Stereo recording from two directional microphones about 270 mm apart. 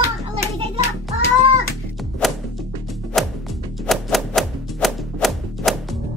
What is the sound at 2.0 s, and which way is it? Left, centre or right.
Music, centre.